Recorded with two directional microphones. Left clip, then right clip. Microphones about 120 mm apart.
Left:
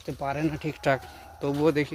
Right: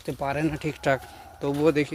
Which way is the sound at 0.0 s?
30° right (ahead or behind).